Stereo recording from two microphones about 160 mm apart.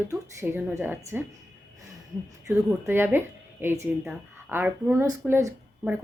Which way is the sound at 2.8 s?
15° right (ahead or behind).